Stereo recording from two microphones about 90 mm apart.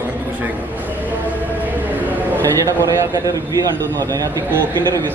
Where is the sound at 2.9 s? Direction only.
40° right (ahead or behind).